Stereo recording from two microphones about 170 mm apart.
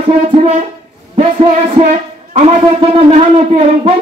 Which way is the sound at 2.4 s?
35° right (ahead or behind).